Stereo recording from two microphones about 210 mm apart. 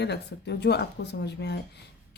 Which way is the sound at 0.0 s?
55° left (ahead or behind).